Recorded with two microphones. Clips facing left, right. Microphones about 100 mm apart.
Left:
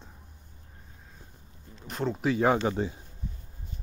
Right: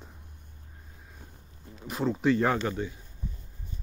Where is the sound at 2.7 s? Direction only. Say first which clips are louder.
Left 3 dB; 30° left (ahead or behind).